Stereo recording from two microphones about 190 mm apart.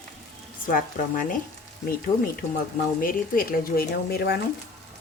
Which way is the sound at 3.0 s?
50° left (ahead or behind).